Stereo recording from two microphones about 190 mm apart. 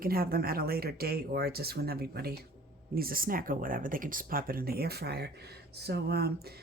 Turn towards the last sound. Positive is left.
turn(degrees=-55)  # may be behind; listen again after turning